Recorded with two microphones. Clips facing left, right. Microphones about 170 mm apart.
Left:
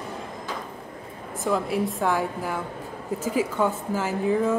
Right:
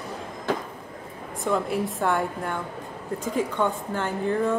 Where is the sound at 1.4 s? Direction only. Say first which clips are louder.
Left 1 dB; centre (ahead or behind).